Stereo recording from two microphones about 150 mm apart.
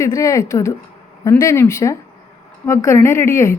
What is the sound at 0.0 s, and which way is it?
A woman's voice, 20° left (ahead or behind).